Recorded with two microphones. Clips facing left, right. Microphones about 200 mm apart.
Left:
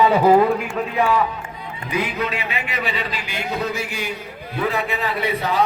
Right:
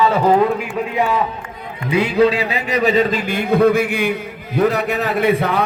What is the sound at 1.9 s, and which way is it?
A man's voice, 30° right (ahead or behind).